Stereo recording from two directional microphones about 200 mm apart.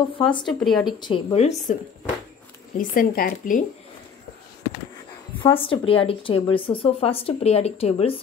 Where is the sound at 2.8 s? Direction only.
45° left (ahead or behind).